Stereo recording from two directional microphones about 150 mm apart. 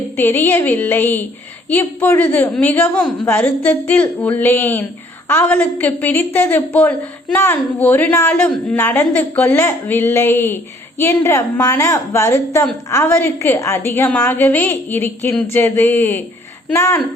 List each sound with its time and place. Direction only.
0.2 s a woman's voice: 15° left (ahead or behind)